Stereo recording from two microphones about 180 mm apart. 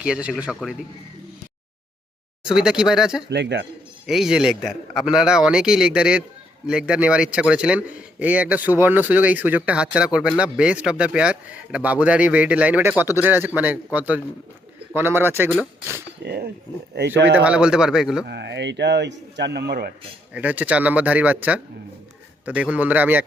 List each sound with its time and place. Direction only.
0.0 s a man's voice: 5° right (ahead or behind)
2.5 s a man's voice: 5° right (ahead or behind)
3.2 s speech: 75° right (ahead or behind)
4.0 s a man's voice: 5° right (ahead or behind)
16.2 s speech: 65° right (ahead or behind)
17.2 s speech: 75° right (ahead or behind)
17.4 s a man's voice: 5° right (ahead or behind)
18.3 s speech: 75° right (ahead or behind)
20.3 s a man's voice: 10° right (ahead or behind)